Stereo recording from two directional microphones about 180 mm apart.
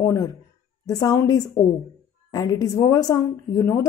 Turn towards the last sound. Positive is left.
turn(degrees=15)  # may be behind; listen again after turning